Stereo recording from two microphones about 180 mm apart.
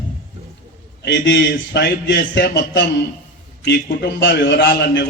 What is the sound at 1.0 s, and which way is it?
A man's voice, 75° left (ahead or behind).